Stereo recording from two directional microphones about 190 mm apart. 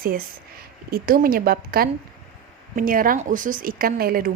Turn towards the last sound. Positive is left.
turn(degrees=-50)  # may be behind; listen again after turning